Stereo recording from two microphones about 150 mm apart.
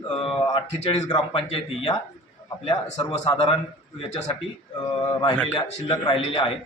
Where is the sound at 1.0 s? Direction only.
35° left (ahead or behind).